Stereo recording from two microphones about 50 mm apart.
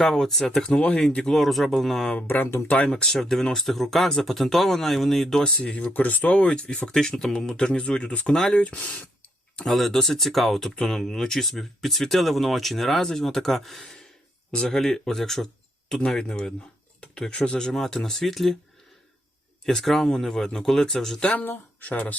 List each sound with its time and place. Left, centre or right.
0.0 s speech: centre
1.2 s speech: centre
2.2 s speech: left
2.6 s speech: left; by 5.4 s centre
5.4 s speech: centre
5.7 s speech: left
6.3 s speech: centre
9.6 s speech: centre
19.8 s speech: centre
21.2 s speech: left